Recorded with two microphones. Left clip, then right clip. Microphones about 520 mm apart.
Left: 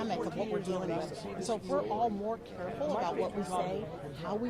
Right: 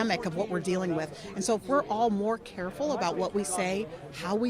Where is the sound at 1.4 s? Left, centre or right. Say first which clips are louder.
Right 6 dB; right.